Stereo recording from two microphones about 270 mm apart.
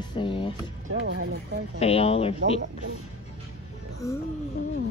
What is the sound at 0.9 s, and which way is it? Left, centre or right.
Speech, right.